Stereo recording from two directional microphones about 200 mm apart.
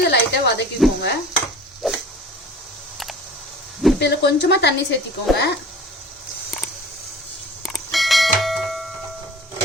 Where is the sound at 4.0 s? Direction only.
55° left (ahead or behind).